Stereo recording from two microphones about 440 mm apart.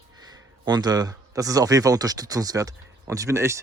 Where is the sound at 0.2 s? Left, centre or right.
Centre.